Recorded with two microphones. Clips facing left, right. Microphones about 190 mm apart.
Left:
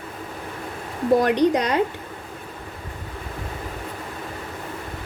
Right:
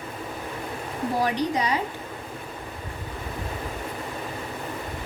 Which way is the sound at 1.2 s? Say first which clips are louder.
Left 3 dB; 65° left (ahead or behind).